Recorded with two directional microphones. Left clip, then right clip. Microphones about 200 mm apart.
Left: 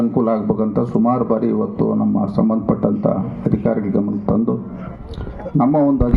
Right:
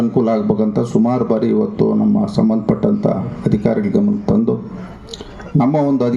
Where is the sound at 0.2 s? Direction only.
75° right (ahead or behind).